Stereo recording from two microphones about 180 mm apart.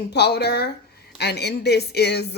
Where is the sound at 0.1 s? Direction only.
70° left (ahead or behind).